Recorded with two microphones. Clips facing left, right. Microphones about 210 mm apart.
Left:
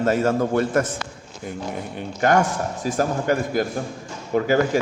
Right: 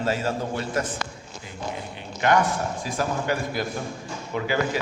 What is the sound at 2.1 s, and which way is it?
A man's voice, 45° left (ahead or behind).